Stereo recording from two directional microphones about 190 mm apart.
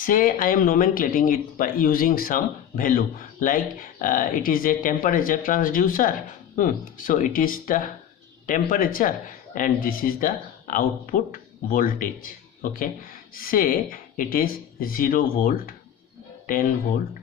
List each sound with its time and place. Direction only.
0.0 s speech: 45° left (ahead or behind)